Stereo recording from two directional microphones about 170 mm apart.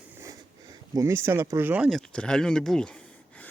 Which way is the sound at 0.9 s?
15° right (ahead or behind).